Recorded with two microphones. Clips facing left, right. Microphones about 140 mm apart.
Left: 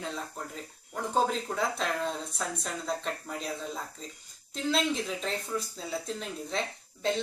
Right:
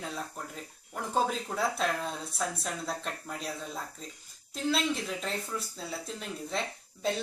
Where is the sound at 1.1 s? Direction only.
5° right (ahead or behind).